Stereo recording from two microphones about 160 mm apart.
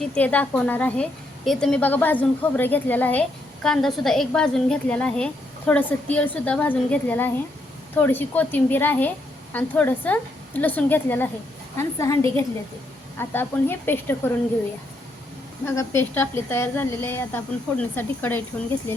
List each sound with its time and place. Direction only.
0.0 s a woman's voice: 10° left (ahead or behind)
15.6 s a woman's voice: 20° left (ahead or behind)